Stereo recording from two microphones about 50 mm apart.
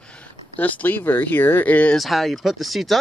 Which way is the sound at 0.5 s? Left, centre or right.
Left.